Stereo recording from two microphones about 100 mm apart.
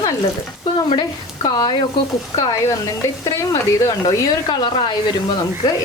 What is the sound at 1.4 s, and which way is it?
Speech, 40° left (ahead or behind).